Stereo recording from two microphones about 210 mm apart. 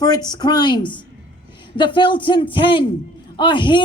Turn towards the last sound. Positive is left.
turn(degrees=20)  # may be behind; listen again after turning